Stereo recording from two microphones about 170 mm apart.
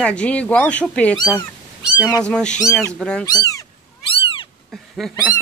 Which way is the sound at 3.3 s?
20° left (ahead or behind).